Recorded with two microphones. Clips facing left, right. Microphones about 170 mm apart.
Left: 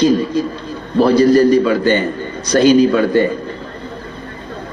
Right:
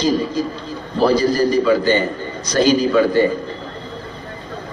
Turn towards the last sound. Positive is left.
turn(degrees=55)  # may be behind; listen again after turning